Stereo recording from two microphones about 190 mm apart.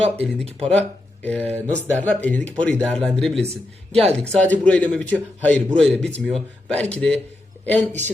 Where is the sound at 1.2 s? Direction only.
10° left (ahead or behind).